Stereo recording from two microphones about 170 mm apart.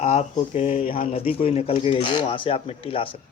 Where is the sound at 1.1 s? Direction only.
35° left (ahead or behind).